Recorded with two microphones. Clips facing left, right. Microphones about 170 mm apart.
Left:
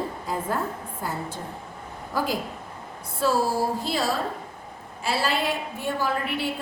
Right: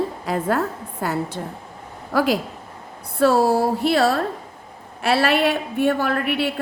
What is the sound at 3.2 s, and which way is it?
A woman's voice, 65° right (ahead or behind).